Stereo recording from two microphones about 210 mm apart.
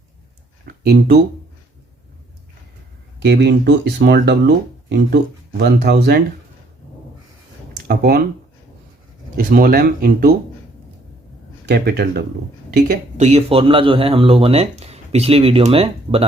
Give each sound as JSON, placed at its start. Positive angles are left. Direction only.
{"t": 0.6, "sound": "a sound", "side_deg": -45}
{"t": 3.2, "sound": "speech", "side_deg": -55}
{"t": 7.9, "sound": "speech", "side_deg": -45}
{"t": 9.3, "sound": "speech", "side_deg": -45}
{"t": 11.7, "sound": "speech", "side_deg": -50}
{"t": 12.9, "sound": "speech", "side_deg": -35}